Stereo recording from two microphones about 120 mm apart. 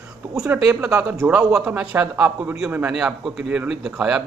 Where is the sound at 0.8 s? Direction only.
25° right (ahead or behind).